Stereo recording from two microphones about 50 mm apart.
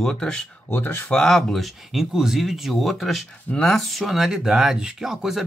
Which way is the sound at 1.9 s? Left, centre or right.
Centre.